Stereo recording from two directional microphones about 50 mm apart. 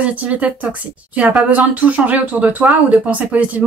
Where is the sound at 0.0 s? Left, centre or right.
Right.